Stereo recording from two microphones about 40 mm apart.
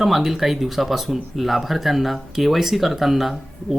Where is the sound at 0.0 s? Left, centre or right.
Centre.